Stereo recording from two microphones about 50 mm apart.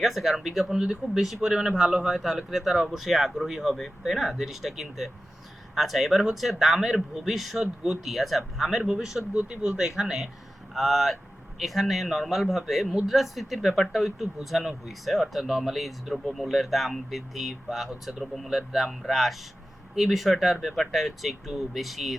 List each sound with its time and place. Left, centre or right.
0.0 s speech: centre
9.4 s speech: centre